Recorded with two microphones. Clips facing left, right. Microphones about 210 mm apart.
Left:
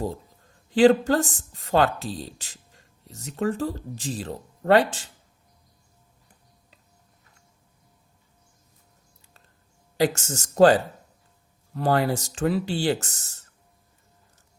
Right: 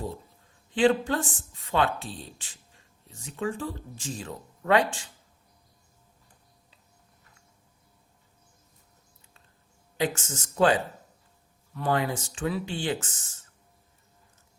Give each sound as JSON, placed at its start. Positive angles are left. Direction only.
{"t": 0.7, "sound": "a woman's voice", "side_deg": 40}
{"t": 10.0, "sound": "a woman's voice", "side_deg": 40}